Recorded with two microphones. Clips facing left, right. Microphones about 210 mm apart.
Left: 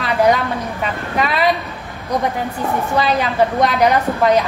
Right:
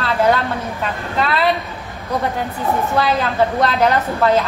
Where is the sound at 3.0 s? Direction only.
15° left (ahead or behind).